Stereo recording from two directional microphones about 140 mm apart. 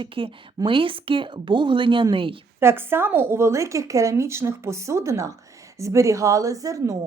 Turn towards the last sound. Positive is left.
turn(degrees=-25)  # may be behind; listen again after turning